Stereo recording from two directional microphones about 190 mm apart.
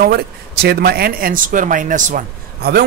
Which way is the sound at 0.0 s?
55° right (ahead or behind).